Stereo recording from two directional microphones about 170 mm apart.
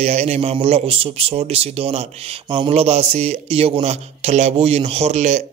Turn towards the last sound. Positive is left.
turn(degrees=-45)  # may be behind; listen again after turning